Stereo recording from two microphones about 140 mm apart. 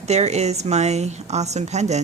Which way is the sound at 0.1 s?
50° right (ahead or behind).